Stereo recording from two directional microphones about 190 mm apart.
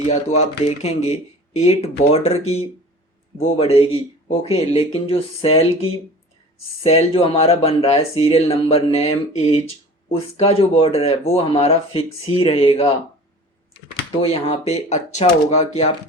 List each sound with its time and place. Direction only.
0.1 s speech: 35° left (ahead or behind)
3.6 s speech: 30° left (ahead or behind)
14.2 s speech: 35° left (ahead or behind)